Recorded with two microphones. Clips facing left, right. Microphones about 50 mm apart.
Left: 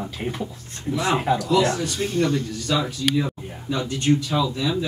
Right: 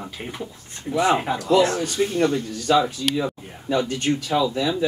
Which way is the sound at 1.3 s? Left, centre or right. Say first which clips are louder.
Right 2 dB; right.